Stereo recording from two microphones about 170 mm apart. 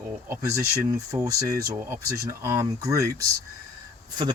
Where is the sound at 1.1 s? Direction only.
40° right (ahead or behind).